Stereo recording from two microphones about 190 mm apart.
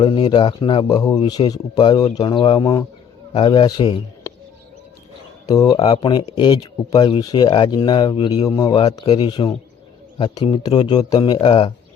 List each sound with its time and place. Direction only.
0.0 s speech: 25° left (ahead or behind)
5.5 s speech: 20° left (ahead or behind)